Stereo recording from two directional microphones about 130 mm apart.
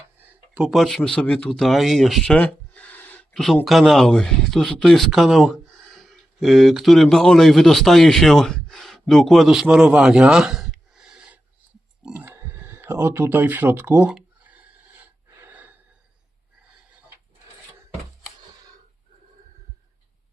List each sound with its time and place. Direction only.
0.2 s a sound: 10° right (ahead or behind)
0.7 s speech: centre (ahead or behind); by 14.1 s 20° right (ahead or behind)
14.1 s gasp: 10° right (ahead or behind)